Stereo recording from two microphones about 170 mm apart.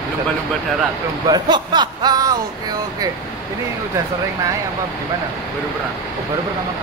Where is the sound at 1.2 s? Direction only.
25° right (ahead or behind).